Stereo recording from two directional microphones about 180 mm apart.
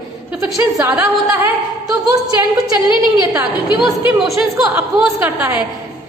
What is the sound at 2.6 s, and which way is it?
Speech, 20° right (ahead or behind).